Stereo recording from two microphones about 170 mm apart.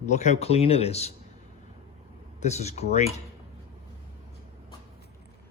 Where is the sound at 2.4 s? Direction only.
40° left (ahead or behind).